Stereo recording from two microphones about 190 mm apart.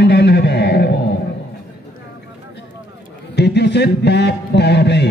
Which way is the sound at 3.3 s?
60° left (ahead or behind).